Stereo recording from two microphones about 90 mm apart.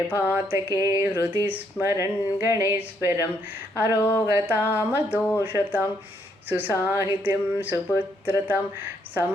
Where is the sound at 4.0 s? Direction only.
25° left (ahead or behind).